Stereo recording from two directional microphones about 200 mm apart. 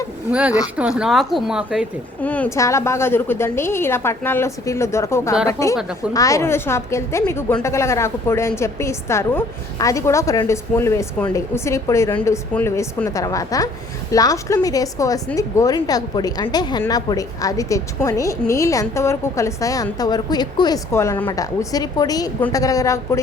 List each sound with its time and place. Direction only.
0.3 s a woman's voice: 5° right (ahead or behind)
2.2 s a woman's voice: 10° left (ahead or behind)